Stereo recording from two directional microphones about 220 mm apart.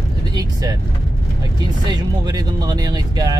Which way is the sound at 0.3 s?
20° right (ahead or behind).